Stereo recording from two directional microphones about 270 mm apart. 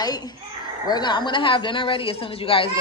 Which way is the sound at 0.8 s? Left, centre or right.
Centre.